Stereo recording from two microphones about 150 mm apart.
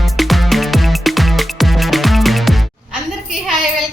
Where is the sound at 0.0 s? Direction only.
Centre (ahead or behind).